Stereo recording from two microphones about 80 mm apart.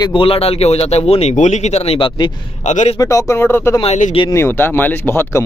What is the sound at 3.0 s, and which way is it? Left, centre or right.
Speech, left.